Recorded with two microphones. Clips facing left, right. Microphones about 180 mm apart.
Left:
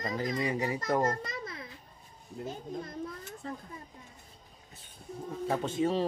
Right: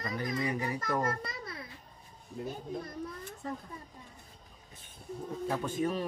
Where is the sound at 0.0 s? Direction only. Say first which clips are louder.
Left 2 dB; 20° left (ahead or behind).